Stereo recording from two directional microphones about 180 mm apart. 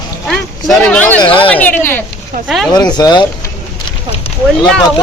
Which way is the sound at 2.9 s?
25° left (ahead or behind).